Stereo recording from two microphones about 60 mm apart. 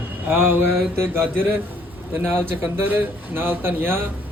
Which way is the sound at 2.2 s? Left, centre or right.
Right.